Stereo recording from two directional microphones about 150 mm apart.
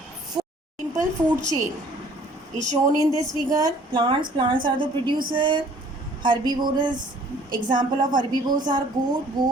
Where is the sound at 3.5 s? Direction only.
25° right (ahead or behind).